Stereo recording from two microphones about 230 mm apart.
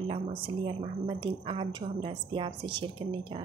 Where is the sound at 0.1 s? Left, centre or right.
Right.